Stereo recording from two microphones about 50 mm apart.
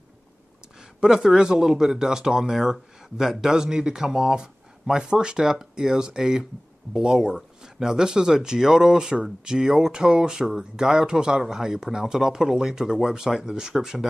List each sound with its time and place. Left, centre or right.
0.7 s speech: centre